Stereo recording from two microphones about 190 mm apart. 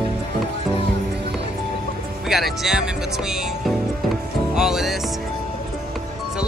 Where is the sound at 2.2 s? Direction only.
Centre (ahead or behind).